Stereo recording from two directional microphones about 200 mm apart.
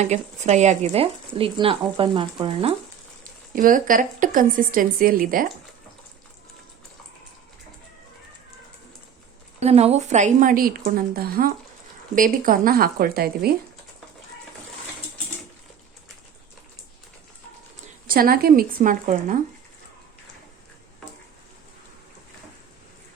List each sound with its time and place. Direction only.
0.0 s speech: 35° right (ahead or behind)
3.5 s a woman's voice: 40° right (ahead or behind)
9.6 s a woman's voice: 30° right (ahead or behind); by 13.5 s 50° right (ahead or behind)
18.1 s a woman's voice: 45° right (ahead or behind)